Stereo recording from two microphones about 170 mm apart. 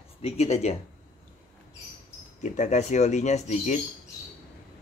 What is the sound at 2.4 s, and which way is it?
Speech, 45° left (ahead or behind).